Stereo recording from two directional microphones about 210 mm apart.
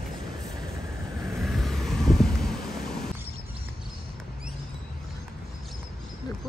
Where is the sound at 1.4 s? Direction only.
Centre (ahead or behind).